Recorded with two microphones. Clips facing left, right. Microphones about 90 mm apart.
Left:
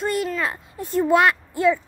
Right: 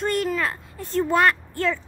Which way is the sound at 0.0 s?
5° left (ahead or behind).